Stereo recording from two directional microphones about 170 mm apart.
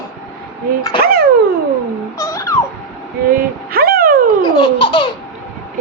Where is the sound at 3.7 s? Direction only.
60° right (ahead or behind).